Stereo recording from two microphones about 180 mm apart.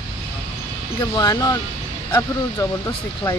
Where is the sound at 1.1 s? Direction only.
20° left (ahead or behind).